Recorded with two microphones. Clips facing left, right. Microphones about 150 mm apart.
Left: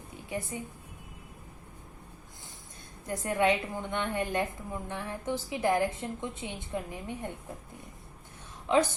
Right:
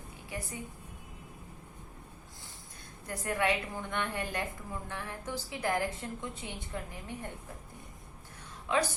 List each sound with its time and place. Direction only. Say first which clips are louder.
0.3 s a woman's voice: left 5 dB; 20° left (ahead or behind)
3.1 s a woman's voice: left 4 dB; 20° left (ahead or behind)
8.6 s a woman's voice: left 5 dB; 20° left (ahead or behind)